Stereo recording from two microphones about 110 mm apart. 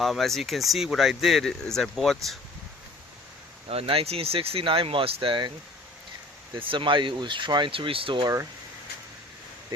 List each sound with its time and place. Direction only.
0.0 s speech: centre (ahead or behind)
3.7 s speech: 60° right (ahead or behind)
6.7 s speech: 50° right (ahead or behind)